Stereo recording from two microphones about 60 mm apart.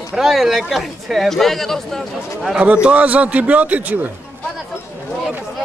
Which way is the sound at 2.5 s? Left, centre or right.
Right.